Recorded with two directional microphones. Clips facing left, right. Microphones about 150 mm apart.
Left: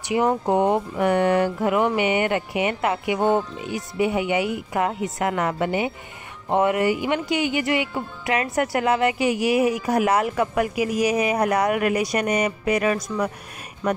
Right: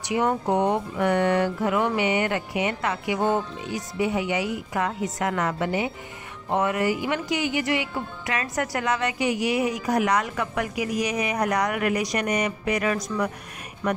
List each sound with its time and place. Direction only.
0.1 s speech: 25° left (ahead or behind)